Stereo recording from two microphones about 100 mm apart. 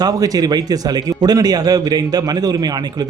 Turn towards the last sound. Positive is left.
turn(degrees=-40)  # may be behind; listen again after turning